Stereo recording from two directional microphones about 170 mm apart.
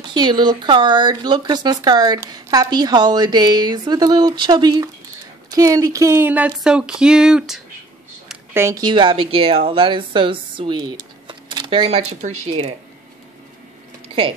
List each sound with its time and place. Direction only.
0.0 s speech: 25° right (ahead or behind); by 7.6 s 5° right (ahead or behind)
8.5 s speech: 20° right (ahead or behind); by 12.7 s 35° right (ahead or behind)
14.0 s a sound: 35° right (ahead or behind)